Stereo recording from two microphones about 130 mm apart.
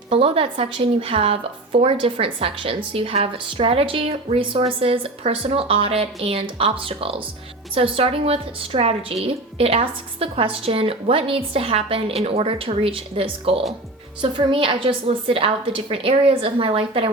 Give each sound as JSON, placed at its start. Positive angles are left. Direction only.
{"t": 0.1, "sound": "a woman's voice", "side_deg": -45}